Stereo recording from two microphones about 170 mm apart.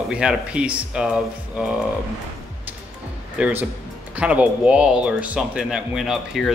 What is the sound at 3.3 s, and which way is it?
Speech, 5° right (ahead or behind).